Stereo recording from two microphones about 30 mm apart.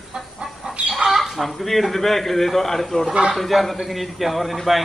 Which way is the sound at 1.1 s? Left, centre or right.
Centre.